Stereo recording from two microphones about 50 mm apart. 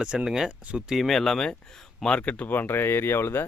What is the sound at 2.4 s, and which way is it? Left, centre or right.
Speech, left.